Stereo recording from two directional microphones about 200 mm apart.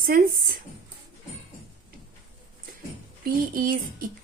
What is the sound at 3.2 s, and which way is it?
Speech, 45° right (ahead or behind).